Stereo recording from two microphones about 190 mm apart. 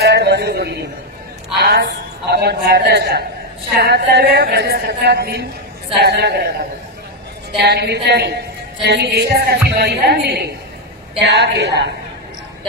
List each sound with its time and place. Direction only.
0.0 s a sound: 60° right (ahead or behind)
1.6 s a man's voice: 60° right (ahead or behind)
7.6 s a woman's voice: 60° right (ahead or behind)